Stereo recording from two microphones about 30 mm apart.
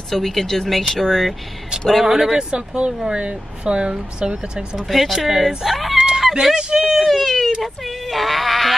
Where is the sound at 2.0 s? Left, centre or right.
Centre.